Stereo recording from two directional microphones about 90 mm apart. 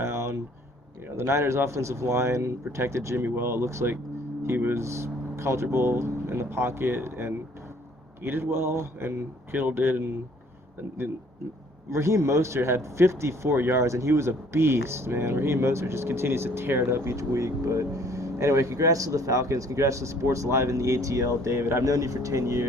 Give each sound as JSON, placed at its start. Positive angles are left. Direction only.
{"t": 0.0, "sound": "a sound", "side_deg": -30}
{"t": 1.1, "sound": "speech", "side_deg": -30}
{"t": 11.9, "sound": "speech", "side_deg": -30}